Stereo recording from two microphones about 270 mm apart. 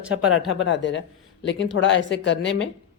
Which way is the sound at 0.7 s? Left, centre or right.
Left.